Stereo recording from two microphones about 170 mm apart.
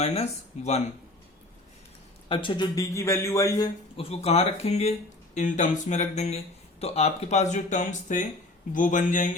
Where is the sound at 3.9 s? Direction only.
35° left (ahead or behind).